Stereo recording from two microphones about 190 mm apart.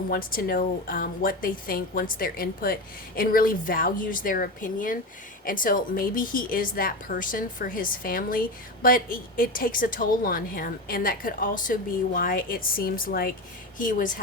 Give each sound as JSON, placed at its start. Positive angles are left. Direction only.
{"t": 0.1, "sound": "a woman's voice", "side_deg": 50}